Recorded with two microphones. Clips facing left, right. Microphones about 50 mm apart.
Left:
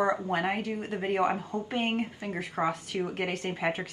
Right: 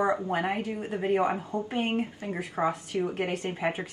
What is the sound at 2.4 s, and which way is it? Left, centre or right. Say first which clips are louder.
Speech: right 1 dB; centre.